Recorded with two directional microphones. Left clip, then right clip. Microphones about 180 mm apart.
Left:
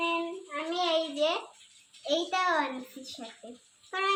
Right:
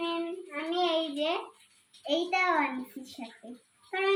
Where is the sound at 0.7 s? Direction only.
25° left (ahead or behind).